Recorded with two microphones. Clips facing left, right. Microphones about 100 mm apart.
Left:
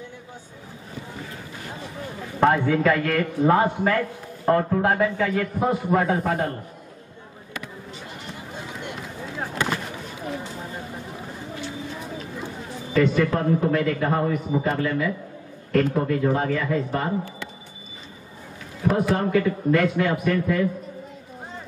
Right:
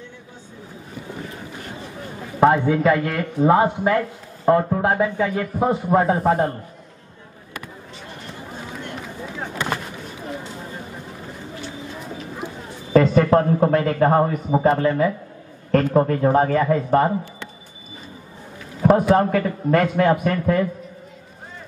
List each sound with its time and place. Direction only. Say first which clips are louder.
2.4 s a man's voice: right 3 dB; 20° right (ahead or behind)
12.9 s a man's voice: right 6 dB; 40° right (ahead or behind)
19.0 s a man's voice: right 4 dB; 45° right (ahead or behind)